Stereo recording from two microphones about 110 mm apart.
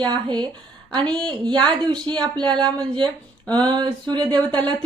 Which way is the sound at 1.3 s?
45° right (ahead or behind).